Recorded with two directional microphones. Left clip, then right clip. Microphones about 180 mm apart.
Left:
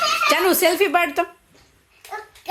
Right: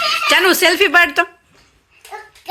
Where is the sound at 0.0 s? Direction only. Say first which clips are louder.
Right 4 dB; centre (ahead or behind).